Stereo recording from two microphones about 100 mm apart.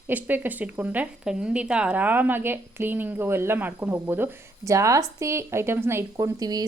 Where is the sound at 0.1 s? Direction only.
20° right (ahead or behind).